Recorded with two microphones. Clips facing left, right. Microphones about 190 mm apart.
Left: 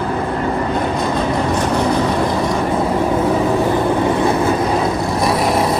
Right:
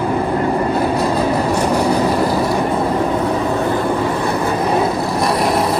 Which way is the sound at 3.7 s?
15° left (ahead or behind).